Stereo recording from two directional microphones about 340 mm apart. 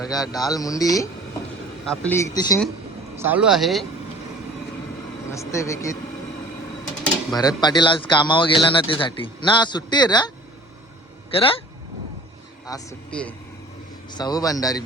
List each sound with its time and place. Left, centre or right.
0.1 s speech: centre
3.2 s speech: centre
5.3 s speech: centre
7.0 s speech: centre
12.6 s speech: centre